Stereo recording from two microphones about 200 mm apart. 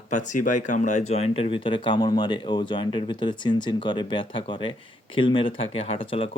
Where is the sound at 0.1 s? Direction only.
40° left (ahead or behind).